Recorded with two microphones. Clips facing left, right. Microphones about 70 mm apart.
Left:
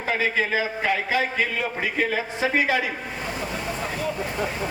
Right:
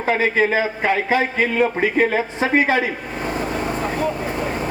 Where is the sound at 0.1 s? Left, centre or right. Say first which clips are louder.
Right 6 dB; right.